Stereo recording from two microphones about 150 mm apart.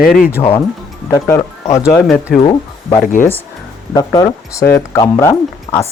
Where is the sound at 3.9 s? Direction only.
25° left (ahead or behind).